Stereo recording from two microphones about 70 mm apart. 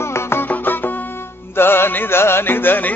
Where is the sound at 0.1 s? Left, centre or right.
Left.